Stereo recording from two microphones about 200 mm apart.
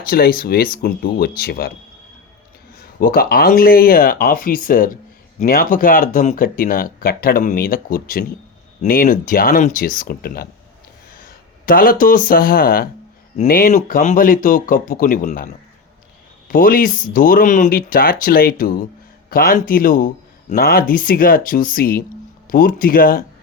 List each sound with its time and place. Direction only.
0.0 s speech: 50° left (ahead or behind)
3.0 s speech: 45° left (ahead or behind)
16.5 s speech: 45° left (ahead or behind)